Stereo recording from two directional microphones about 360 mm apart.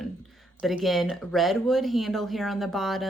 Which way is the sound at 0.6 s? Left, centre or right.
Centre.